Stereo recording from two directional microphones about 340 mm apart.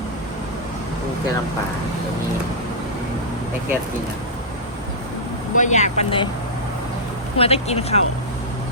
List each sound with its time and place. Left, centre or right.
5.5 s speech: left
7.3 s speech: centre